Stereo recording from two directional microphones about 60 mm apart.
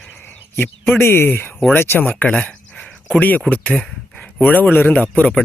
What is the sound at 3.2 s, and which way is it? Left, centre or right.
Speech, left.